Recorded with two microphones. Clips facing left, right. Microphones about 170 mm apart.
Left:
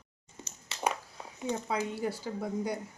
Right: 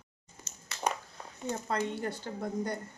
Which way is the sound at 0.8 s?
10° left (ahead or behind).